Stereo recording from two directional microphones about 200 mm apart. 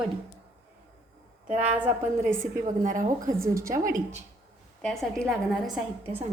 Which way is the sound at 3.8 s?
40° right (ahead or behind).